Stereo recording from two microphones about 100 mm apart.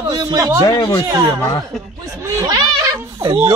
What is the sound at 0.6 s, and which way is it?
Speech, 40° left (ahead or behind).